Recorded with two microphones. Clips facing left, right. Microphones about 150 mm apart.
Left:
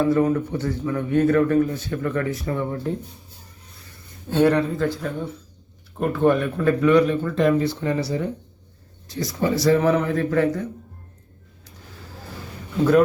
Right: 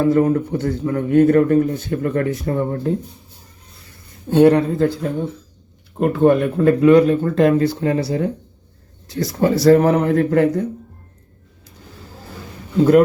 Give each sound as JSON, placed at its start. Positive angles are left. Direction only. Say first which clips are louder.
{"t": 0.0, "sound": "speech", "louder": "right 4 dB", "side_deg": -40}
{"t": 1.2, "sound": "speech", "louder": "right 4 dB", "side_deg": -30}
{"t": 4.3, "sound": "speech", "louder": "right 6 dB", "side_deg": -15}
{"t": 4.5, "sound": "speech", "louder": "right 5 dB", "side_deg": -30}
{"t": 6.1, "sound": "speech", "louder": "right 5 dB", "side_deg": -35}
{"t": 9.1, "sound": "a man's voice", "louder": "right 5 dB", "side_deg": -55}